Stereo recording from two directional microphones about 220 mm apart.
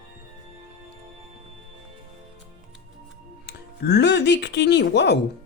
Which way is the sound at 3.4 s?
50° left (ahead or behind).